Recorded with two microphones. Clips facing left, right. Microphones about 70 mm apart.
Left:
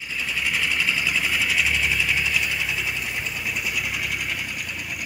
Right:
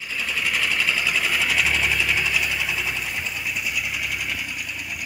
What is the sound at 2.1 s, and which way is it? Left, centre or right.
Vehicle, right.